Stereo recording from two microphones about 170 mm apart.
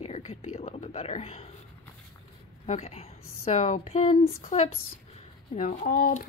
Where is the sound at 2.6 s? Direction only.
40° left (ahead or behind).